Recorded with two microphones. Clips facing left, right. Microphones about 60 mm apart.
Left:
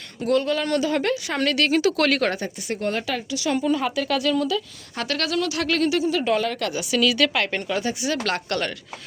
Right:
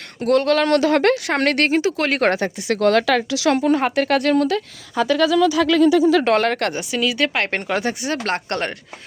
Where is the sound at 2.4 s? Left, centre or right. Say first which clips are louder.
Right 8 dB; right.